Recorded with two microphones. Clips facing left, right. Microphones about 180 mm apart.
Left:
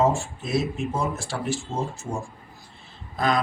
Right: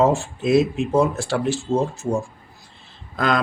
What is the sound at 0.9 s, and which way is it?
Speech, 70° right (ahead or behind).